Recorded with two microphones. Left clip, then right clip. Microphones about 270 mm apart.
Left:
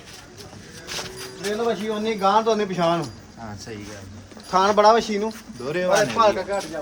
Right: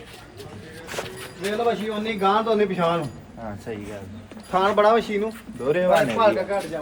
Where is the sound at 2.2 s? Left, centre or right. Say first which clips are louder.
Even; left.